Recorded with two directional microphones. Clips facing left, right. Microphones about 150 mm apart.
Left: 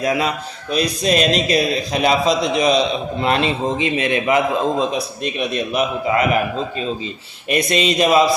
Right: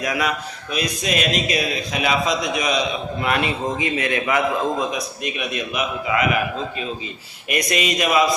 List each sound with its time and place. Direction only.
0.0 s a man's voice: 25° left (ahead or behind)
7.4 s speech: 30° left (ahead or behind)